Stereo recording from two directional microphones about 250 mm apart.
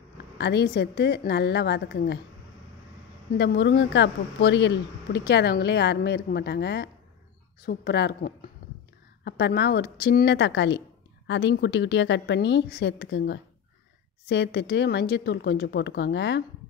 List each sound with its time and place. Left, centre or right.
0.4 s a woman's voice: left
3.3 s a woman's voice: left